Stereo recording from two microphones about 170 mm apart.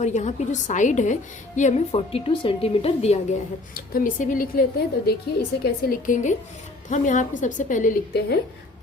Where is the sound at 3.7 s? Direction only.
55° left (ahead or behind).